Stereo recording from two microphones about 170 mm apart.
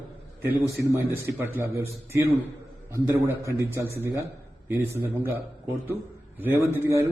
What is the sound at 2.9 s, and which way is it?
A man's voice, 15° right (ahead or behind).